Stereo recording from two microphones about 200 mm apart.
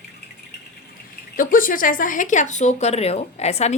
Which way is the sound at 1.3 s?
45° left (ahead or behind).